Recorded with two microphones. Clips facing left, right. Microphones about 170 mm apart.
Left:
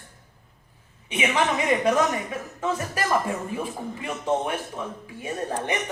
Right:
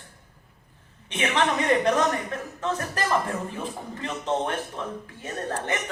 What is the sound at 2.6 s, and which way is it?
A man's voice, 10° left (ahead or behind).